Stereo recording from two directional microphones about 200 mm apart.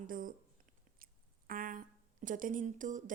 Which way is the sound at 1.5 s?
45° right (ahead or behind).